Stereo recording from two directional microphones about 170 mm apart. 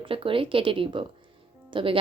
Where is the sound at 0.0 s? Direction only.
30° right (ahead or behind).